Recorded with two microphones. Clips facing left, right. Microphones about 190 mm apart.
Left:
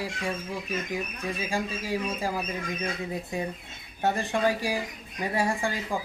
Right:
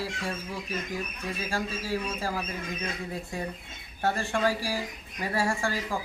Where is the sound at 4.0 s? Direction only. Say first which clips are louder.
Left 1 dB; 15° left (ahead or behind).